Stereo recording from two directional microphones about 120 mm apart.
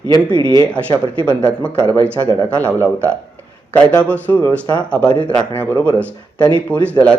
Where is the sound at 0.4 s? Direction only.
45° right (ahead or behind).